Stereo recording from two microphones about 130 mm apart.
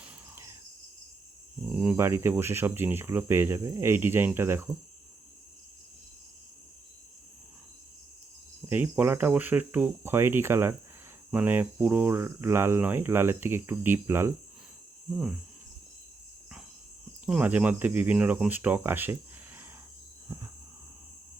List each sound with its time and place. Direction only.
0.0 s cricket: 20° right (ahead or behind)
1.7 s speech: 10° right (ahead or behind)
8.7 s speech: 15° right (ahead or behind)
17.2 s speech: 10° right (ahead or behind)
20.2 s a sound: 20° right (ahead or behind)